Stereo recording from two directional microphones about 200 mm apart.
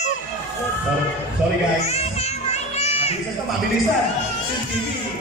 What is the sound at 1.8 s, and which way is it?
Music, 30° left (ahead or behind).